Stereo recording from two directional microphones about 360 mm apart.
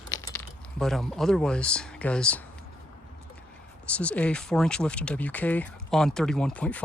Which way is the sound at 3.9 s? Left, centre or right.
Centre.